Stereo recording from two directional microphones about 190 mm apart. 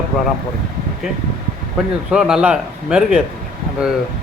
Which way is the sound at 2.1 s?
5° right (ahead or behind).